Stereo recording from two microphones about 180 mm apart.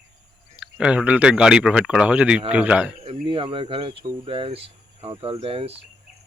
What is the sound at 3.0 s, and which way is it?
Speech, 30° right (ahead or behind).